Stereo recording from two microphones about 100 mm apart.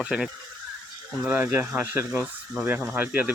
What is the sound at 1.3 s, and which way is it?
Speech, 20° right (ahead or behind).